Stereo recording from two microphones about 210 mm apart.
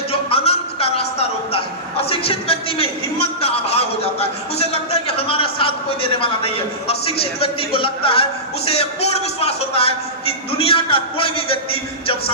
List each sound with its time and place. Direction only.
0.1 s a man's voice: 25° left (ahead or behind)